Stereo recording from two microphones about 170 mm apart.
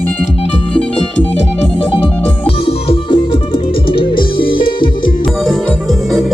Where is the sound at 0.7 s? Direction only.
5° left (ahead or behind).